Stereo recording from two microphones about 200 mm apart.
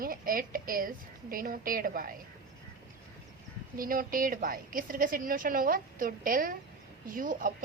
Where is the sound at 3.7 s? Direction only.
45° right (ahead or behind).